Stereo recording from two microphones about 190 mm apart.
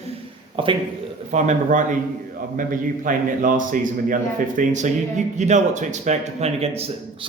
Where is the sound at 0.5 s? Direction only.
25° right (ahead or behind).